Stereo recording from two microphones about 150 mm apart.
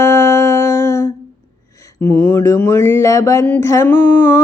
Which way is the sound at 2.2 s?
15° left (ahead or behind).